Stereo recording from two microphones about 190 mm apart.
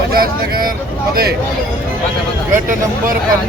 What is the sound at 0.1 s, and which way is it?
Speech, 50° right (ahead or behind).